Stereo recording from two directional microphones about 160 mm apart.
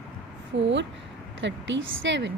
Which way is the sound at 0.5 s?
90° right.